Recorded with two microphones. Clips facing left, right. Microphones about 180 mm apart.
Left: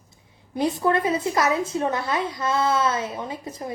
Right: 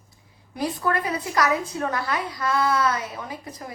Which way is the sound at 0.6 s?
25° left (ahead or behind).